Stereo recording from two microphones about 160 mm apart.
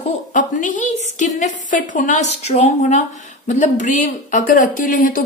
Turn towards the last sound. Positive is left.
turn(degrees=55)  # may be behind; listen again after turning